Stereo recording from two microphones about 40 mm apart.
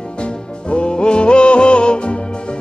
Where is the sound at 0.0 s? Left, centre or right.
Left.